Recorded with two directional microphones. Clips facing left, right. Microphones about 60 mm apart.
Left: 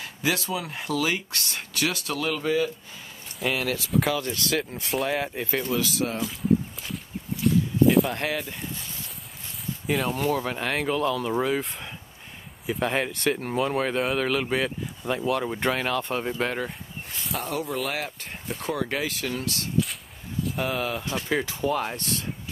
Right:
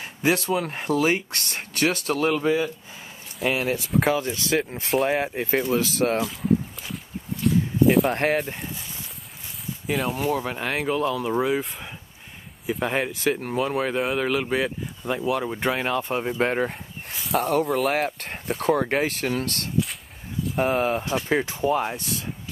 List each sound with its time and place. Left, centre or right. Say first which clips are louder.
0.0 s speech: right 4 dB; right
6.2 s walk: right 1 dB; centre
8.1 s speech: right 6 dB; right
9.8 s speech: right 1 dB; centre
15.7 s speech: right 2 dB; centre
16.3 s speech: right 5 dB; right
17.1 s a sound: right 8 dB; centre
17.4 s speech: right 8 dB; right
17.9 s speech: right 7 dB; right
18.9 s speech: right 5 dB; right
20.5 s speech: right 7 dB; right
21.0 s speech: right 3 dB; centre
21.9 s speech: even; centre